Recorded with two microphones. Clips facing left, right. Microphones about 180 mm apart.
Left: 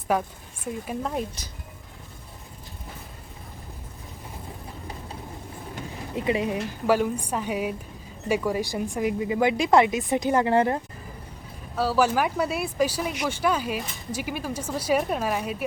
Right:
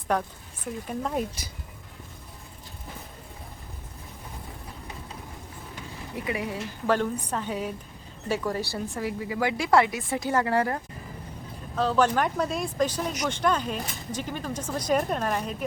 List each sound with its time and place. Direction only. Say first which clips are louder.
0.1 s speech: left 2 dB; 10° left (ahead or behind)
6.1 s a woman's voice: left 6 dB; 25° left (ahead or behind)
6.8 s a woman's voice: left 2 dB; 10° left (ahead or behind)
11.8 s speech: left 1 dB; 5° left (ahead or behind)